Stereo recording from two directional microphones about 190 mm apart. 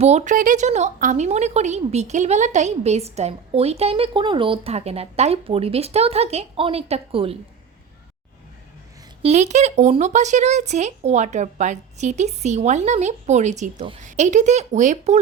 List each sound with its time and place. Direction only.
0.0 s a woman's voice: 35° right (ahead or behind)
9.2 s a woman's voice: 35° right (ahead or behind)